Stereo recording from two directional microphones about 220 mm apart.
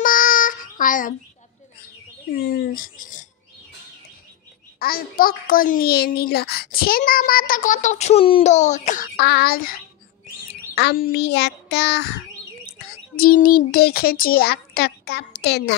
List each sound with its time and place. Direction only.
0.0 s child singing: 40° left (ahead or behind)
2.3 s speech: 40° left (ahead or behind)
4.7 s a child's voice: 40° left (ahead or behind)